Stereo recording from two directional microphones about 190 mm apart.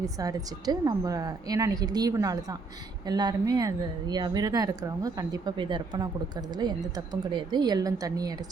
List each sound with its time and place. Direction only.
0.0 s speech: 20° right (ahead or behind)